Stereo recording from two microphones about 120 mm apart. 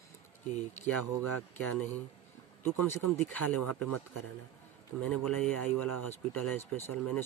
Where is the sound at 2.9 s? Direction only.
15° left (ahead or behind).